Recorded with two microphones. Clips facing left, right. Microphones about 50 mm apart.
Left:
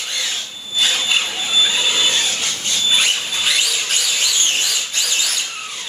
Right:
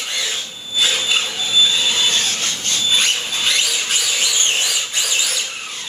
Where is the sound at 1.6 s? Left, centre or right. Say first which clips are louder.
Right 1 dB; left.